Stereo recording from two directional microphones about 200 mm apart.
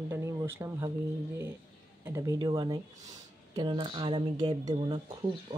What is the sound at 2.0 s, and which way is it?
Speech, 15° right (ahead or behind).